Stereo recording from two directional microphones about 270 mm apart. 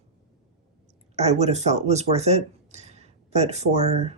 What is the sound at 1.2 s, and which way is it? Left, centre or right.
Speech, right.